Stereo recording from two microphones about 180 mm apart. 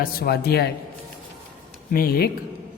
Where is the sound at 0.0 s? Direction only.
60° left (ahead or behind).